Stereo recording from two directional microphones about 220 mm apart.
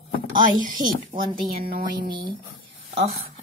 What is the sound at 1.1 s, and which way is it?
Speech, 20° right (ahead or behind).